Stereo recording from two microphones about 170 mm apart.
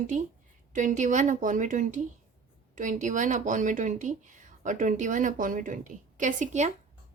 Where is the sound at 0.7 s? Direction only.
50° right (ahead or behind).